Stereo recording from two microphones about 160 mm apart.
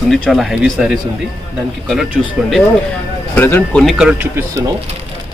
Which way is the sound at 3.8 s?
Centre (ahead or behind).